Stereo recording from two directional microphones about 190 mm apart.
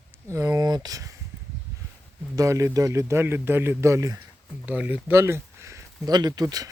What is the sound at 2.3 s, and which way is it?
Speech, 15° right (ahead or behind).